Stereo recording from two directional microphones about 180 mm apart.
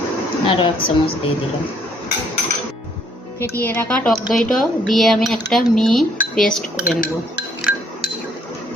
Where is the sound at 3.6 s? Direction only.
10° left (ahead or behind).